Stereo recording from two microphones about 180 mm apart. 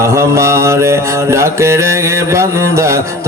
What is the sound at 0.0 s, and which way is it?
Mantra, 15° right (ahead or behind).